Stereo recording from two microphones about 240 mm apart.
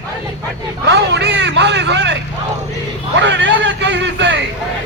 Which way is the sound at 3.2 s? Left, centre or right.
Right.